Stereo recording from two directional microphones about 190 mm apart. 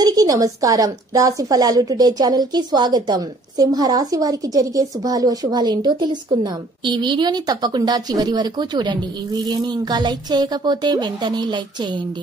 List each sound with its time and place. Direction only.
0.0 s a woman's voice: 20° right (ahead or behind)